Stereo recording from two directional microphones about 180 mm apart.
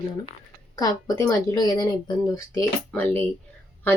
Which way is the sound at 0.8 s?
20° left (ahead or behind).